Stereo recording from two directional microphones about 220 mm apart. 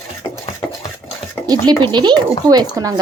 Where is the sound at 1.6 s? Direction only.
20° right (ahead or behind).